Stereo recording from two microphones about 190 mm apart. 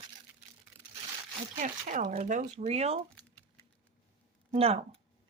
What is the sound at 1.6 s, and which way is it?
Speech, 45° right (ahead or behind).